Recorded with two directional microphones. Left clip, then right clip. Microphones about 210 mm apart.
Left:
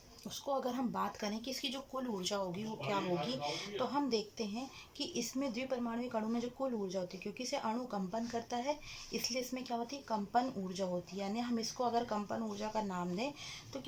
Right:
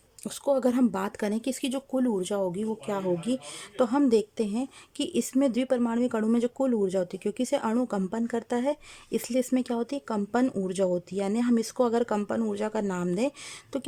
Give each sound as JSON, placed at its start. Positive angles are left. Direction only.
{"t": 0.3, "sound": "speech", "side_deg": -45}